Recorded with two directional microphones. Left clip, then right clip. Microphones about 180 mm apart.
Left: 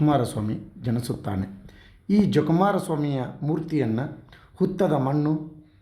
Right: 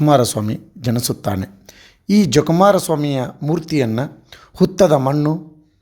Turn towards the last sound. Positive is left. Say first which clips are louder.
# right 9 dB
turn(degrees=-50)  # may be behind; listen again after turning